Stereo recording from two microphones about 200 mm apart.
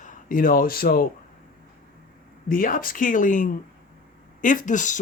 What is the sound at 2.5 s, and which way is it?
Speech, 45° left (ahead or behind).